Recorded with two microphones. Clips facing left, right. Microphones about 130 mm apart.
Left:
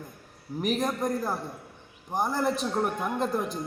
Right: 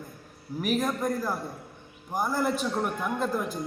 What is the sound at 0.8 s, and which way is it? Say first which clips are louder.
A man's voice: even; 20° left (ahead or behind).